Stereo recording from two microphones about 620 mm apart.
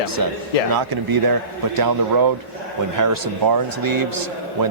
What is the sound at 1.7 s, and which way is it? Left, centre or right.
A man's voice, right.